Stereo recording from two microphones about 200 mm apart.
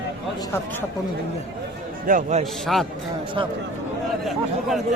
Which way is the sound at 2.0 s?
40° right (ahead or behind).